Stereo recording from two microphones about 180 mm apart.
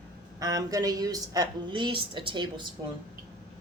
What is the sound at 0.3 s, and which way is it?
A man's voice, 20° right (ahead or behind).